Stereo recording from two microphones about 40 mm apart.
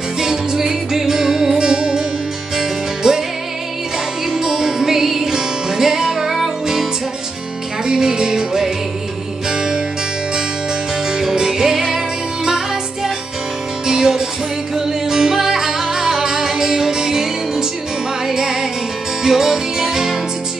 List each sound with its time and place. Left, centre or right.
0.2 s music: centre
4.3 s music: centre
7.8 s music: centre
11.1 s music: centre